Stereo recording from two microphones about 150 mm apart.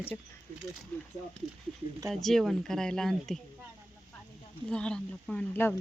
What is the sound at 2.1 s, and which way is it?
Speech, centre (ahead or behind).